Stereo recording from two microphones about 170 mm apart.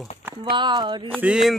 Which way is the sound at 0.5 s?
25° right (ahead or behind).